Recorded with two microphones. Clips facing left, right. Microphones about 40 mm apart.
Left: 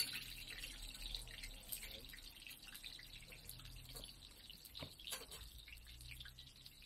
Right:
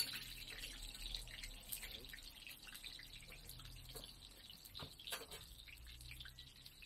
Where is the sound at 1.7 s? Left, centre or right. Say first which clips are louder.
Right 1 dB; centre.